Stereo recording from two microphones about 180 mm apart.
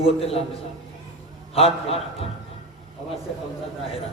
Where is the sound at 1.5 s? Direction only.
35° left (ahead or behind).